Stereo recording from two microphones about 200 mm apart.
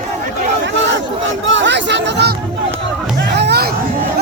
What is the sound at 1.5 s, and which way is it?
Chatter, 65° right (ahead or behind).